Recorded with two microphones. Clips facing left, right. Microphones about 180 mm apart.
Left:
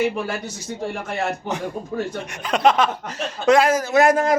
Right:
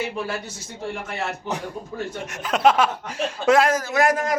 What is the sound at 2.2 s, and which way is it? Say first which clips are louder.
Speech: even; centre (ahead or behind).